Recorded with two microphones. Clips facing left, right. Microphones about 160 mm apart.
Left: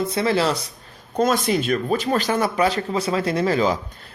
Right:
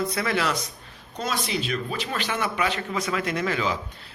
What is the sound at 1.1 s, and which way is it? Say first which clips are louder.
Speech: left 9 dB; 45° left (ahead or behind).